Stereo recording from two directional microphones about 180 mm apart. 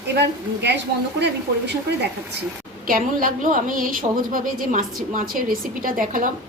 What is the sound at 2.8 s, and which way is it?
A woman's voice, 50° right (ahead or behind).